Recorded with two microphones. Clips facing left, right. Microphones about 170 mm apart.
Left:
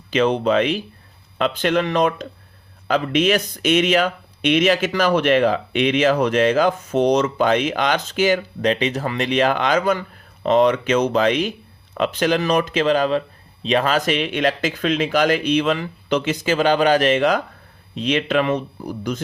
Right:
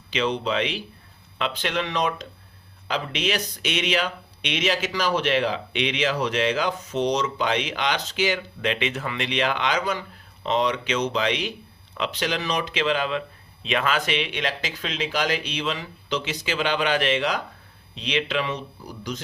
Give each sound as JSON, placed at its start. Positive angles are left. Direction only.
{"t": 0.1, "sound": "speech", "side_deg": 50}